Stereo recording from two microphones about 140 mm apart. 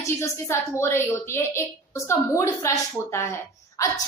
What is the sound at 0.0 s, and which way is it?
A woman's voice, 20° left (ahead or behind).